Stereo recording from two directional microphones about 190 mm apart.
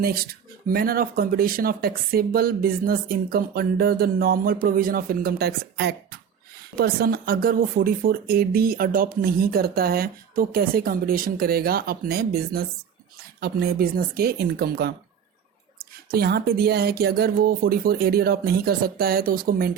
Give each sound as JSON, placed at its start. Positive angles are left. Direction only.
{"t": 0.0, "sound": "speech", "side_deg": -50}